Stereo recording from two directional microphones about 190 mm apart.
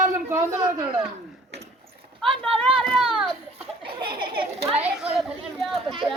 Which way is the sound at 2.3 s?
30° right (ahead or behind).